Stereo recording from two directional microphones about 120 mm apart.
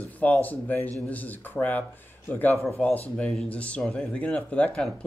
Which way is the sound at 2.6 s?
5° left (ahead or behind).